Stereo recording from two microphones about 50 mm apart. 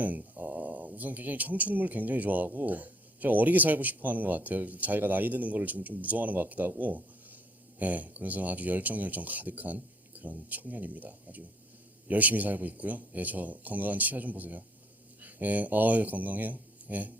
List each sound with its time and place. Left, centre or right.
0.0 s speech: right